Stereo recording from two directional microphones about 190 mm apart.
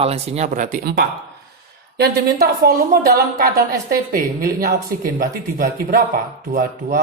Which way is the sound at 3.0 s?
50° right (ahead or behind).